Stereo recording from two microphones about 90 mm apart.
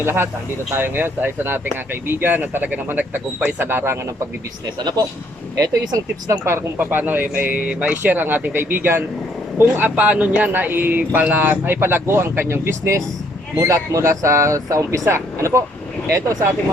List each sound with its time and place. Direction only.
0.0 s speech: 25° right (ahead or behind)
4.8 s speech: 50° right (ahead or behind)
6.4 s speech: 25° right (ahead or behind)